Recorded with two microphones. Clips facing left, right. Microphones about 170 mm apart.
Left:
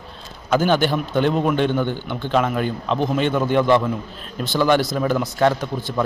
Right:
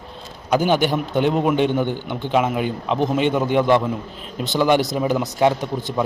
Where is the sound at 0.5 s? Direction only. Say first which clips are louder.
Even; 15° right (ahead or behind).